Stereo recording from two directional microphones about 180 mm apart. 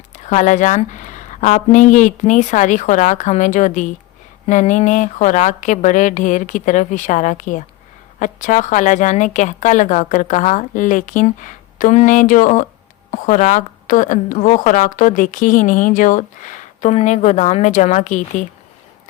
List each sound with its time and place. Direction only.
0.3 s a woman's voice: 40° left (ahead or behind)